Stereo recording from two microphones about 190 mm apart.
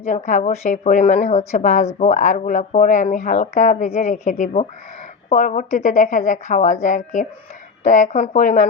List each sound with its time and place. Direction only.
0.0 s speech: 35° left (ahead or behind)